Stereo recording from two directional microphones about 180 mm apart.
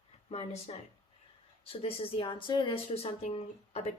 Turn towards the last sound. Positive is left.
turn(degrees=35)  # may be behind; listen again after turning